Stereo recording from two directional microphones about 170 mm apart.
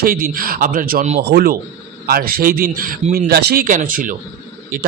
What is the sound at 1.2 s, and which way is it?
Speech, 75° right (ahead or behind).